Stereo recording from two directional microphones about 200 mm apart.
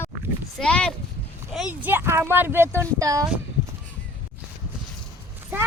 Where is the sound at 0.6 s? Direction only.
5° left (ahead or behind); by 3.2 s 15° right (ahead or behind).